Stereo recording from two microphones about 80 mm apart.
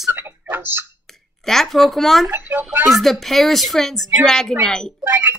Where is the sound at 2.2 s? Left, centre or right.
Right.